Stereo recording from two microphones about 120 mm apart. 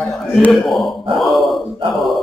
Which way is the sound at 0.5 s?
Centre (ahead or behind).